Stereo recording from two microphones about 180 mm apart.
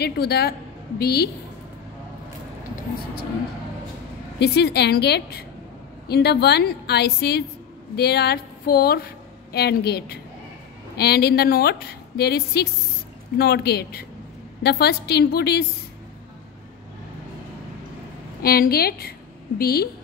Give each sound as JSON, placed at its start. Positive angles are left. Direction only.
{"t": 0.0, "sound": "a woman's voice", "side_deg": 60}
{"t": 4.4, "sound": "a woman's voice", "side_deg": 65}
{"t": 18.4, "sound": "a woman's voice", "side_deg": 55}